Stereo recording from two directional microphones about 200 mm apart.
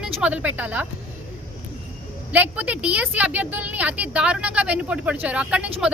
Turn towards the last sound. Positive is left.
turn(degrees=-5)  # may be behind; listen again after turning